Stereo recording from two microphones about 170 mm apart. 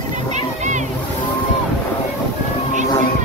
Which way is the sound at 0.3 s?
45° right (ahead or behind).